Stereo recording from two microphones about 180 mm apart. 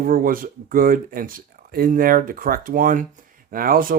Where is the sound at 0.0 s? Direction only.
50° right (ahead or behind).